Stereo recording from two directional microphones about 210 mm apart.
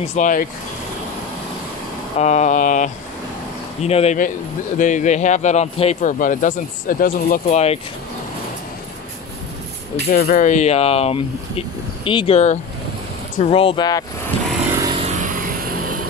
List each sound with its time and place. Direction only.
0.0 s speech: 35° left (ahead or behind)
2.1 s speech: 35° left (ahead or behind)
10.1 s speech: 45° left (ahead or behind); by 14.0 s 20° left (ahead or behind)
14.8 s vehicle: 25° right (ahead or behind); by 16.0 s 40° right (ahead or behind)